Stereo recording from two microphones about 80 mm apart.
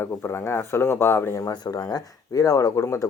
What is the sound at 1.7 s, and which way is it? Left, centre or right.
Speech, left.